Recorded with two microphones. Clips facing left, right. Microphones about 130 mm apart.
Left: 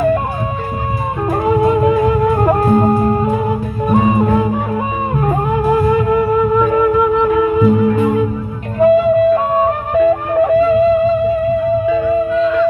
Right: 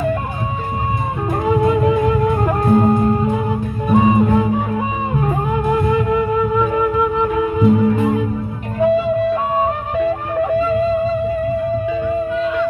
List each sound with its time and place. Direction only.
1.4 s music: 55° left (ahead or behind)
5.6 s music: 50° left (ahead or behind)
11.8 s music: 90° left